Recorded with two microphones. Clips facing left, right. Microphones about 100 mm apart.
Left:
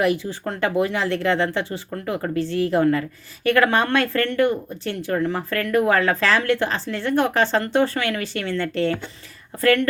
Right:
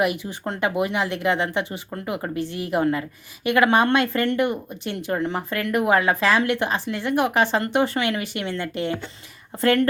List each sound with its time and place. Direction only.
0.0 s speech: 15° right (ahead or behind)